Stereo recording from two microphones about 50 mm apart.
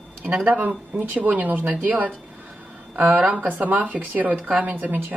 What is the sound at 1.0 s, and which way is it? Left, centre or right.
Speech, right.